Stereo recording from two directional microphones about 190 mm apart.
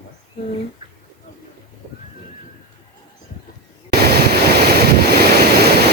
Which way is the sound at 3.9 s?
55° right (ahead or behind).